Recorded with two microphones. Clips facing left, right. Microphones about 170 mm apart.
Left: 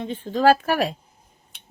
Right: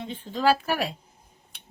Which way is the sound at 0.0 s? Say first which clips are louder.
Left 6 dB; 45° left (ahead or behind).